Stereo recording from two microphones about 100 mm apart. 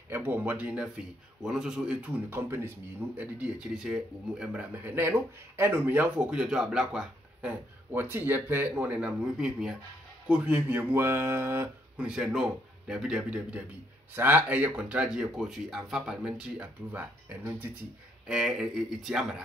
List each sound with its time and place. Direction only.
0.1 s a man's voice: 20° right (ahead or behind)
7.9 s a man's voice: 20° right (ahead or behind)
12.0 s a man's voice: 5° right (ahead or behind)